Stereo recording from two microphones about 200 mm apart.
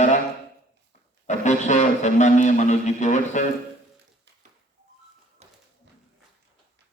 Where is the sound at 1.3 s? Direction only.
35° left (ahead or behind).